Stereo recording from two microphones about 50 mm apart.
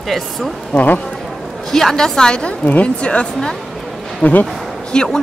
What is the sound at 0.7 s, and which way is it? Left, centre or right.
Speech, left.